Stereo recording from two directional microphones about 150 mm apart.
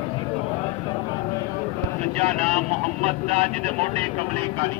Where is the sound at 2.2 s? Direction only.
45° right (ahead or behind).